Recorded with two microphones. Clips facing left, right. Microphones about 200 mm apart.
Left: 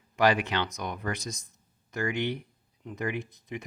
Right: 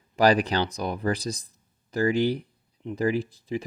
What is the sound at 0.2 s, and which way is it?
Speech, 35° right (ahead or behind).